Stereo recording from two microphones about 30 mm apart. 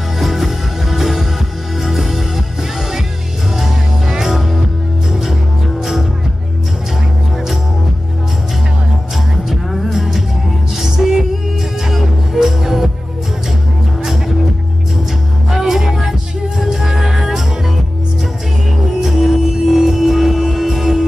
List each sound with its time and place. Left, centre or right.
0.2 s music: centre
3.5 s music: centre
5.8 s music: centre
9.7 s music: centre
14.0 s music: centre
15.5 s music: centre
18.9 s music: centre